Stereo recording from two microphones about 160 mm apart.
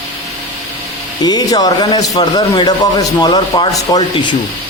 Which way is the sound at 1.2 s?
25° left (ahead or behind).